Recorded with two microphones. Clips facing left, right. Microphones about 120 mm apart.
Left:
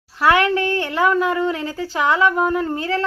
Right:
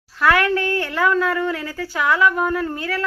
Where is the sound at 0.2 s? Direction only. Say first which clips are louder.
Left 1 dB; 20° left (ahead or behind).